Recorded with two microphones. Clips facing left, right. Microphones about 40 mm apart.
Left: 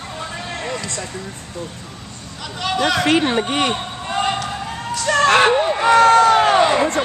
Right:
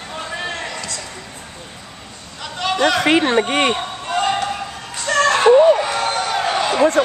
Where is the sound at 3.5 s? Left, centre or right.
Right.